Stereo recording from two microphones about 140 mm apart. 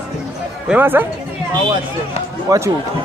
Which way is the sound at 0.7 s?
15° right (ahead or behind).